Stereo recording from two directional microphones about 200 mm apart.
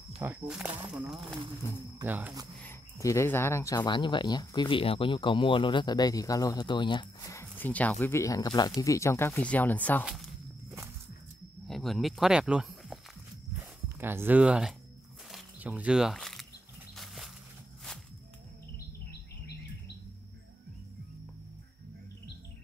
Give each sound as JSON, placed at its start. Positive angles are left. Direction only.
{"t": 0.2, "sound": "speech", "side_deg": -5}
{"t": 2.6, "sound": "speech", "side_deg": 15}
{"t": 11.6, "sound": "speech", "side_deg": 0}
{"t": 15.3, "sound": "a sound", "side_deg": -5}